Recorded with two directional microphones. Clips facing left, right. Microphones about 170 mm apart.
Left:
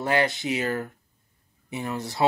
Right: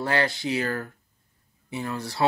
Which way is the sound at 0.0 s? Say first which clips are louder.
Left 1 dB; 20° left (ahead or behind).